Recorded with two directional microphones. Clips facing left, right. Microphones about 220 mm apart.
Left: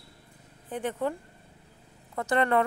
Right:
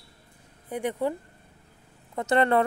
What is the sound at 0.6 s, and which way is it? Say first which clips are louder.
Speech: right 2 dB; 10° right (ahead or behind).